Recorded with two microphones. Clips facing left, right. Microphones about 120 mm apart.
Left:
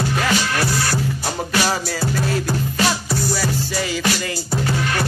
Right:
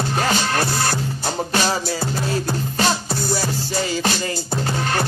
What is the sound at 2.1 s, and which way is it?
Music, 25° right (ahead or behind).